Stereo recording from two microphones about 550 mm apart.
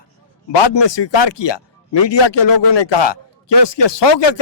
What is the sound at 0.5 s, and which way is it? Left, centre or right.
Speech, left.